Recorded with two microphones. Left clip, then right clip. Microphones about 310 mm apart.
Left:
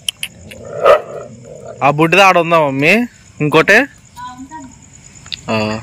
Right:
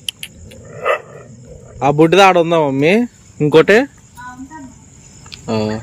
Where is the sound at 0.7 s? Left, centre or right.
Left.